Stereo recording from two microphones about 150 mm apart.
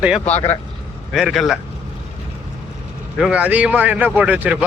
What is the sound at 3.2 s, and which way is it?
Speech, 5° right (ahead or behind).